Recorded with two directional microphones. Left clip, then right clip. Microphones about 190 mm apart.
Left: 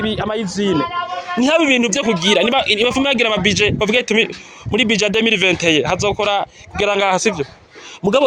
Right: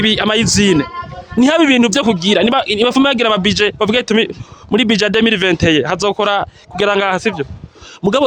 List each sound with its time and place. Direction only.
0.0 s a man's voice: 45° right (ahead or behind)
8.0 s speech: 45° right (ahead or behind)